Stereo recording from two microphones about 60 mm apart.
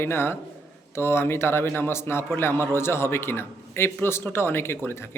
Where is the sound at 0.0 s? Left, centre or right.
Left.